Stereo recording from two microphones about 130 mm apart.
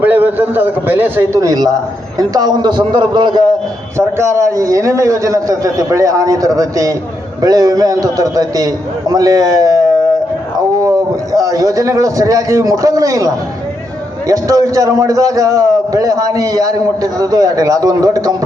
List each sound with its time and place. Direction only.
0.0 s a man's voice: 15° right (ahead or behind); by 3.4 s 35° right (ahead or behind)
3.9 s a man's voice: 20° right (ahead or behind)
10.8 s a man's voice: 25° right (ahead or behind)